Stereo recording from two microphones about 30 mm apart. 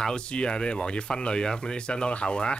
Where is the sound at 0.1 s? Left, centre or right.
Left.